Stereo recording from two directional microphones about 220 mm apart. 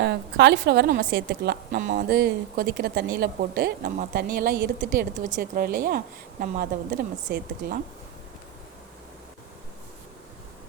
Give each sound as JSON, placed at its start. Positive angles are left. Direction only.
{"t": 0.0, "sound": "a woman's voice", "side_deg": -50}